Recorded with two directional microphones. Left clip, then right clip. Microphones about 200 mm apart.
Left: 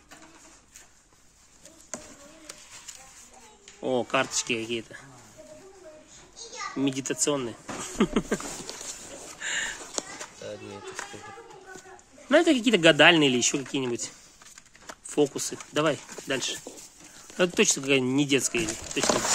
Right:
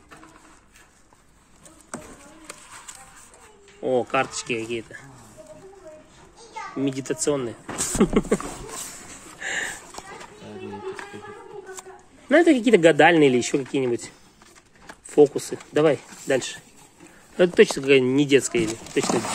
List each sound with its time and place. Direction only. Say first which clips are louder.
3.8 s speech: right 4 dB; 20° left (ahead or behind)
6.8 s a child's voice: right 2 dB; 15° left (ahead or behind); by 8.4 s 5° right (ahead or behind)
9.4 s a sound: right 3 dB; 5° right (ahead or behind)
12.3 s speech: right 5 dB; 10° left (ahead or behind)
17.4 s speech: right 7 dB; 15° left (ahead or behind)
19.0 s a child's voice: right 2 dB; centre (ahead or behind)